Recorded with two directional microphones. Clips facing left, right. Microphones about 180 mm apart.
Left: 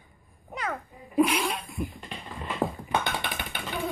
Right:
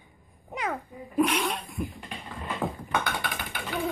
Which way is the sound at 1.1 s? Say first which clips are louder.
Left 1 dB; 5° left (ahead or behind).